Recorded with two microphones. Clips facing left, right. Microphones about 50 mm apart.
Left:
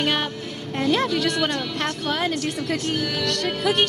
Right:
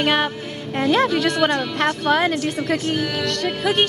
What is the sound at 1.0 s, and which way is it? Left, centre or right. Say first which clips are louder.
Speech: right 4 dB; right.